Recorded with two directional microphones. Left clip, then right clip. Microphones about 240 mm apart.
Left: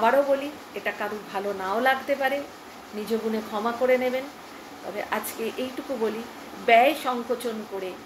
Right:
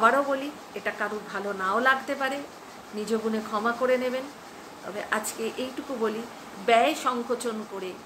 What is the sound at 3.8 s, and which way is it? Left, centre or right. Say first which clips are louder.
A woman's voice: left 3 dB; centre.